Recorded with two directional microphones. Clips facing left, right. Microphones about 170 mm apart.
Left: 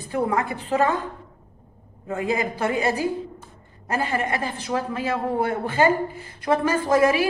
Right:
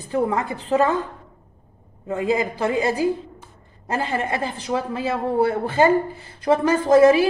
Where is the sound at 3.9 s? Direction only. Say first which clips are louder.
Right 1 dB; 25° right (ahead or behind).